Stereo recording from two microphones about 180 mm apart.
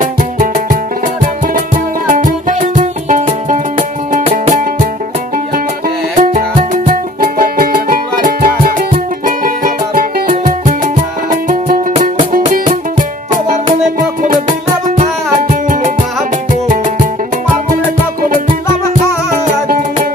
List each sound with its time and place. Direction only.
0.0 s music: 45° right (ahead or behind)
2.1 s music: 45° right (ahead or behind)
6.1 s music: 45° right (ahead or behind)
11.2 s music: 45° right (ahead or behind)
19.4 s music: 45° right (ahead or behind)